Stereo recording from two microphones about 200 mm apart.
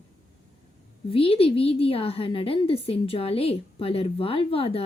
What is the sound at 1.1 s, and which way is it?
A woman's voice, 30° left (ahead or behind).